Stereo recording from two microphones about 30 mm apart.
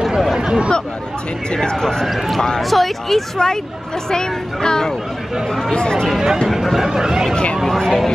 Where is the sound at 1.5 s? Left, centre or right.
Left.